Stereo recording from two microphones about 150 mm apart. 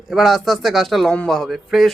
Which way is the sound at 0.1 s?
Centre (ahead or behind).